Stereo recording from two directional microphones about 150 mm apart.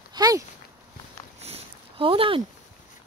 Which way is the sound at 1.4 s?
40° right (ahead or behind).